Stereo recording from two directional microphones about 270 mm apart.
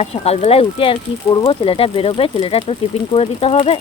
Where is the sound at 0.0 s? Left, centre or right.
Left.